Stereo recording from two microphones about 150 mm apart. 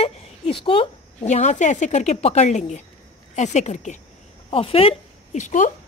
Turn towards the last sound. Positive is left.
turn(degrees=55)  # may be behind; listen again after turning